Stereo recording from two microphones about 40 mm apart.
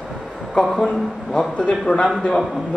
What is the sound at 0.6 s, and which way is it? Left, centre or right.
Speech, centre.